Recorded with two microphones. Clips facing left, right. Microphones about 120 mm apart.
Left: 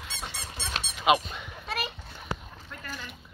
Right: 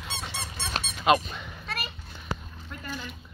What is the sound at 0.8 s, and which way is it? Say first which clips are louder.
Squeak: right 3 dB; 45° right (ahead or behind).